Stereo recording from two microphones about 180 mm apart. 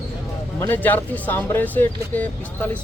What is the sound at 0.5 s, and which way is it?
Speech, 10° left (ahead or behind).